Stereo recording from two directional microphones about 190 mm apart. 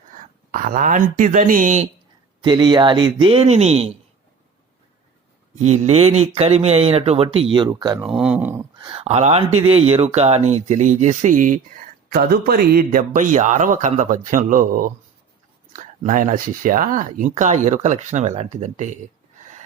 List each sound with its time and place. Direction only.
0.5 s speech: 40° right (ahead or behind)
2.4 s speech: 25° right (ahead or behind)
5.5 s speech: 35° right (ahead or behind)
7.9 s speech: 5° right (ahead or behind)
8.8 s speech: 30° right (ahead or behind)